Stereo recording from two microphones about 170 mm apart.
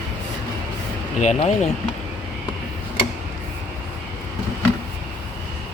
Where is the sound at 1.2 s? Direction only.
40° left (ahead or behind).